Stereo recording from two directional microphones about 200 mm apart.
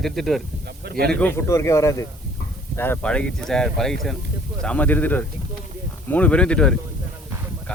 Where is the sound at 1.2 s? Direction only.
10° left (ahead or behind).